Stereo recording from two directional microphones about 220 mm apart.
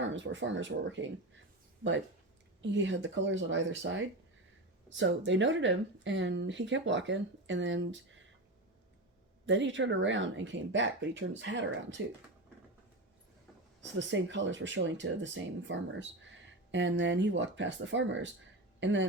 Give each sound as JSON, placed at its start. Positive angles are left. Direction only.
{"t": 0.0, "sound": "speech", "side_deg": -55}
{"t": 2.6, "sound": "speech", "side_deg": -55}
{"t": 9.5, "sound": "speech", "side_deg": -55}
{"t": 14.1, "sound": "speech", "side_deg": -55}